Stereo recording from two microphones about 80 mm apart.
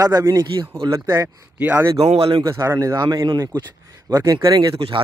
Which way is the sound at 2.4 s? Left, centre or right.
Right.